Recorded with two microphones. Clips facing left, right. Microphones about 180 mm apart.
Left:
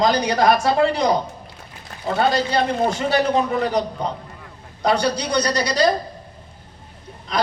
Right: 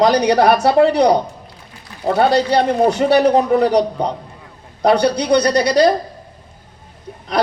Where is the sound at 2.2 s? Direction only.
70° right (ahead or behind).